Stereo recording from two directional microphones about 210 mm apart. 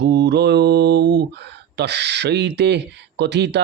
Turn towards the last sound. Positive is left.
turn(degrees=-55)  # may be behind; listen again after turning